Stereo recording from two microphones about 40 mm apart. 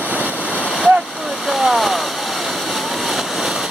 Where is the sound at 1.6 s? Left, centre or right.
Centre.